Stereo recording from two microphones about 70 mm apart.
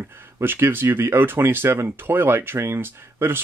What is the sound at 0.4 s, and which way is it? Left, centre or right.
Speech, right.